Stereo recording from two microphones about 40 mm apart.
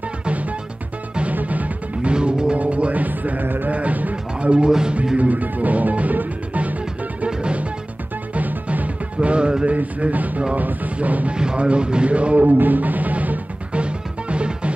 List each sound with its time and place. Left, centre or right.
1.3 s music: right
2.0 s music: right
2.5 s music: right
3.7 s speech: right
4.4 s speech: right
4.6 s speech: centre
5.1 s music: right
8.4 s music: right
9.8 s speech: right
11.3 s speech: right
12.4 s music: right
14.3 s music: right